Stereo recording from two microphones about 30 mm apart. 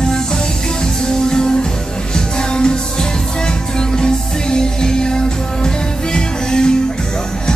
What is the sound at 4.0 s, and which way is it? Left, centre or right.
Music, left.